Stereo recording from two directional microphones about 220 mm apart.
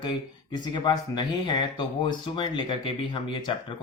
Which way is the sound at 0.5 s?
20° left (ahead or behind).